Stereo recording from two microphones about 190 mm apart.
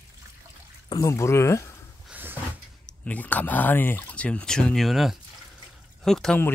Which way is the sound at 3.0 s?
10° left (ahead or behind).